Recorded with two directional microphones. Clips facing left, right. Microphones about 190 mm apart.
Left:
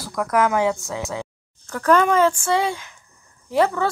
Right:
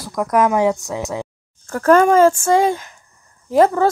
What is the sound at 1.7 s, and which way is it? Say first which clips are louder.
Speech: right 5 dB; 45° right (ahead or behind).